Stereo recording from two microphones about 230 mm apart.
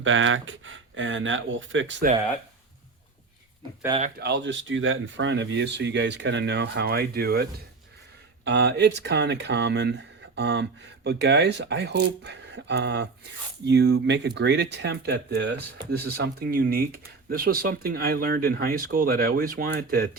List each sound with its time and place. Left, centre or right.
0.0 s speech: right
4.2 s speech: right
8.4 s speech: right